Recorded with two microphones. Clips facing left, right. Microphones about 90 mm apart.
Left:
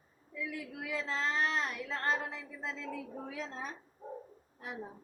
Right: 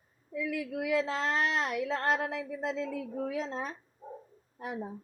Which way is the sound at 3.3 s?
90° right.